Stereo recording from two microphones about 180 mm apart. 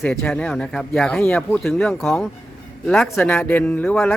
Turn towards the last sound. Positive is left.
turn(degrees=10)  # may be behind; listen again after turning